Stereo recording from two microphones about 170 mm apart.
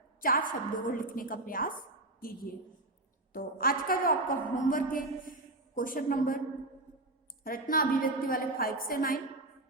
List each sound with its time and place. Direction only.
0.2 s a woman's voice: 55° left (ahead or behind)
7.4 s a woman's voice: 60° left (ahead or behind)